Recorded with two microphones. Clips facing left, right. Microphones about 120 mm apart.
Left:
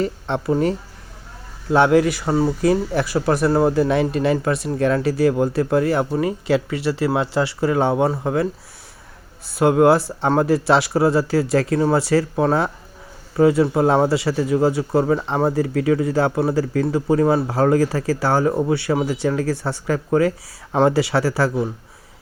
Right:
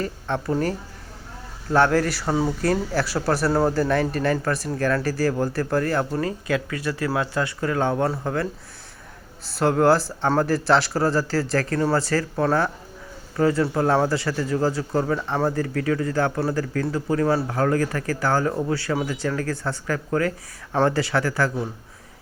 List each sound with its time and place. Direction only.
0.0 s speech: 20° left (ahead or behind)
2.2 s speech: centre (ahead or behind); by 8.4 s 15° left (ahead or behind)
9.6 s speech: 15° left (ahead or behind)